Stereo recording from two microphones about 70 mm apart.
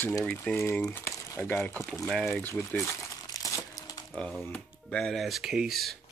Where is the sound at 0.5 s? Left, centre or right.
Left.